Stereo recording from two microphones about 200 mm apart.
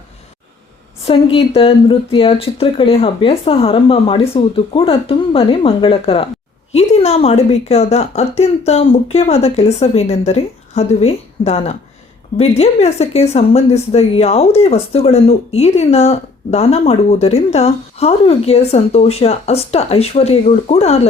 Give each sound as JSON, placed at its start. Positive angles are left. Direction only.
{"t": 1.0, "sound": "speech", "side_deg": 25}